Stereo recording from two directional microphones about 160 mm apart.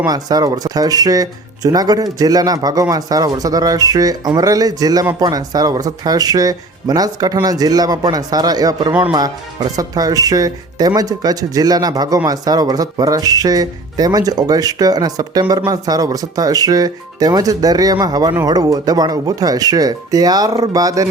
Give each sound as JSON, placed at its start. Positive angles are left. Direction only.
{"t": 0.0, "sound": "speech", "side_deg": -25}
{"t": 8.9, "sound": "speech", "side_deg": -10}
{"t": 9.1, "sound": "speech", "side_deg": -25}